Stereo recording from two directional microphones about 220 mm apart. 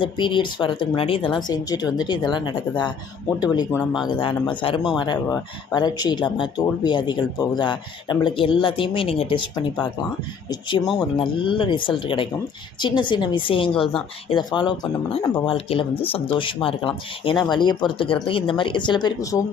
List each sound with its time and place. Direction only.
0.0 s speech: 20° left (ahead or behind)